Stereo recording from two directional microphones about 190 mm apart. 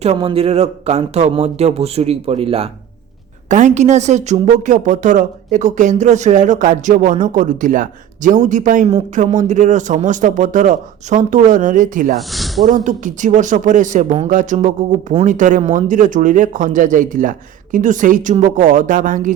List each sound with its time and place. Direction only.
0.0 s a woman's voice: 30° right (ahead or behind)
12.3 s speech: centre (ahead or behind)
12.6 s speech: 40° right (ahead or behind)